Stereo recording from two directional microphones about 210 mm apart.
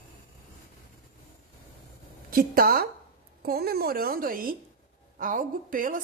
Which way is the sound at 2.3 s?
45° right (ahead or behind).